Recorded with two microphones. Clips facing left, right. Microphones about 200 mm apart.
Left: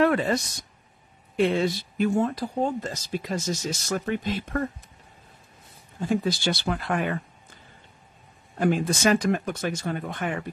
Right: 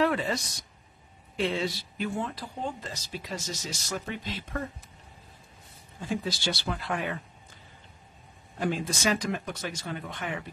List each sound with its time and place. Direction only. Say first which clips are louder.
0.0 s speech: left 5 dB; 55° left (ahead or behind)
5.9 s speech: left 7 dB; 55° left (ahead or behind)
8.5 s speech: left 6 dB; 55° left (ahead or behind)